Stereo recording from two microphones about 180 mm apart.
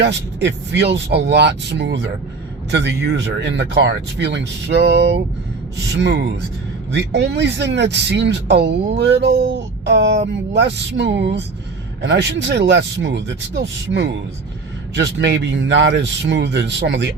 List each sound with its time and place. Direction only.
0.4 s speech: 75° right (ahead or behind)